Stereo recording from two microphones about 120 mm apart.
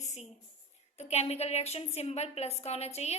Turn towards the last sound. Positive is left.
turn(degrees=65)  # may be behind; listen again after turning